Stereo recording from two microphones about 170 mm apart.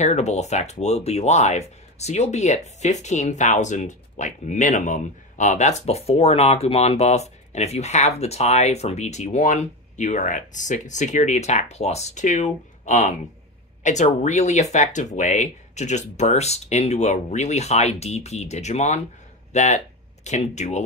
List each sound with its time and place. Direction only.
0.0 s speech: 40° left (ahead or behind)